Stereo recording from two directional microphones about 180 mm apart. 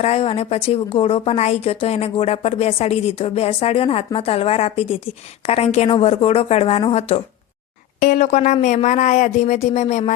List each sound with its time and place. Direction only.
0.0 s a woman's voice: 35° left (ahead or behind)
7.9 s a woman's voice: 45° left (ahead or behind)